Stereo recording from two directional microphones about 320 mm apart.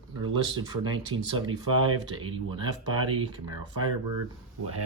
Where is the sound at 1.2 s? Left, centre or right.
Right.